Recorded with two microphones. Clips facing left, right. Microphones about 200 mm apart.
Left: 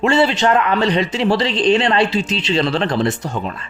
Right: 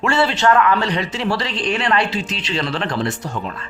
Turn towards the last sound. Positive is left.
turn(degrees=25)  # may be behind; listen again after turning